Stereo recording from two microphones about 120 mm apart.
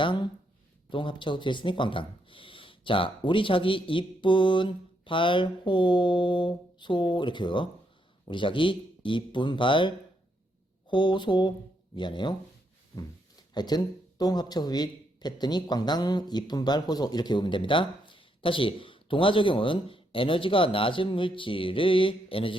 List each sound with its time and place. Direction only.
0.0 s a man's voice: 40° left (ahead or behind)
13.5 s a man's voice: 35° left (ahead or behind)